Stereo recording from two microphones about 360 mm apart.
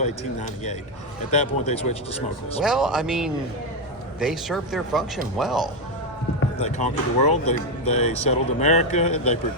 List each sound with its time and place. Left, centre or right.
0.0 s speech: centre
2.6 s speech: centre
6.6 s speech: centre